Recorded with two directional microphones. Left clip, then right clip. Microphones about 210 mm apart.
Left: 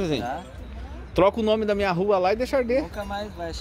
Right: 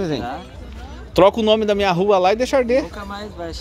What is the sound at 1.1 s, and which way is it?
Speech, 15° right (ahead or behind).